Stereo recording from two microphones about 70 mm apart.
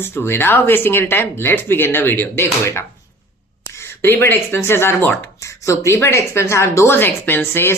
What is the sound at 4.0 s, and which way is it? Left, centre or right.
Speech, left.